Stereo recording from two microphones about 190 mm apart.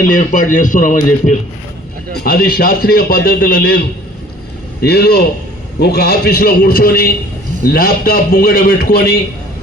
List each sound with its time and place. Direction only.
0.1 s a man's voice: 45° left (ahead or behind)